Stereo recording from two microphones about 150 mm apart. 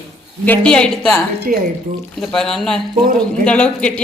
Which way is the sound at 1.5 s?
65° right (ahead or behind).